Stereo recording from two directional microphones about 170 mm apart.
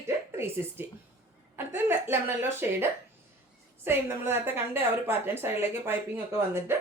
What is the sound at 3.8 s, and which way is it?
Speech, 15° right (ahead or behind).